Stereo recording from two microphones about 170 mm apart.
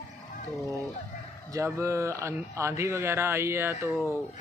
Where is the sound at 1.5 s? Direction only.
15° right (ahead or behind).